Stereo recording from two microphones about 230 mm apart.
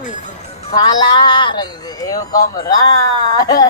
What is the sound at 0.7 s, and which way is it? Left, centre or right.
Speech, centre.